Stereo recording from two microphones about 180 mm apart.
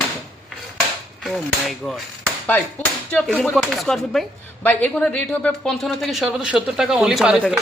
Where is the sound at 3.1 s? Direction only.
5° left (ahead or behind).